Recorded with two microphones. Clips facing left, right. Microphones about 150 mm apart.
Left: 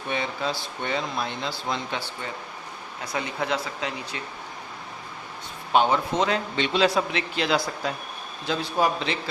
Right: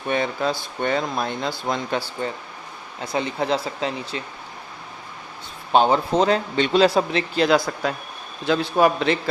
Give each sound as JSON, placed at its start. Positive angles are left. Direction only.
{"t": 0.1, "sound": "speech", "side_deg": -50}
{"t": 3.0, "sound": "a man's voice", "side_deg": -25}
{"t": 5.7, "sound": "a man's voice", "side_deg": -35}
{"t": 8.4, "sound": "a man's voice", "side_deg": -60}